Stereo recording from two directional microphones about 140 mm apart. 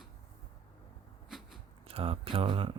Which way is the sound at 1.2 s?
5° right (ahead or behind).